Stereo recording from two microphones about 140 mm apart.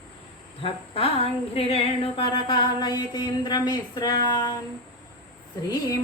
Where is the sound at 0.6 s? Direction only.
45° left (ahead or behind).